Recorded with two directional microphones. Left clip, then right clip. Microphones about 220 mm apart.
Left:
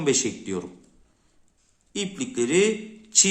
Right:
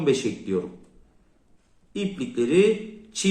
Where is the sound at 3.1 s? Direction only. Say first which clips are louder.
Left 5 dB; 45° left (ahead or behind).